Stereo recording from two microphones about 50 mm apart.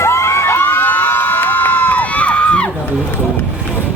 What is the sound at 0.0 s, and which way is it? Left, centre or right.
Crowd, left.